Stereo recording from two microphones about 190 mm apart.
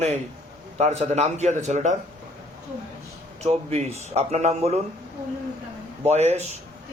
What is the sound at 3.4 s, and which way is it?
A man's voice, 35° right (ahead or behind).